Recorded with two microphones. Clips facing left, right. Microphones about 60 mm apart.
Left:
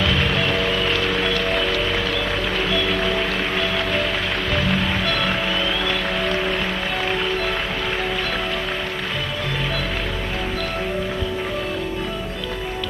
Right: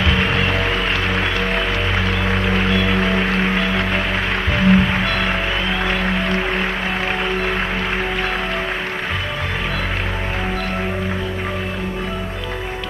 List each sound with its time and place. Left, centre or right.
0.7 s music: right